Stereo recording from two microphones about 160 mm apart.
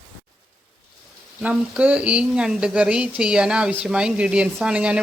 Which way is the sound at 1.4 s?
5° right (ahead or behind).